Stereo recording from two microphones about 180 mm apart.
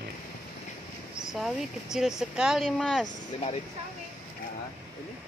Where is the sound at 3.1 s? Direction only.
40° left (ahead or behind).